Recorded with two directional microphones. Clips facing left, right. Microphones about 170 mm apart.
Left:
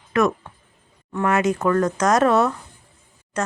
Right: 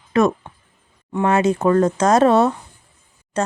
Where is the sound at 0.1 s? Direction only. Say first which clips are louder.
Right 3 dB; 30° right (ahead or behind).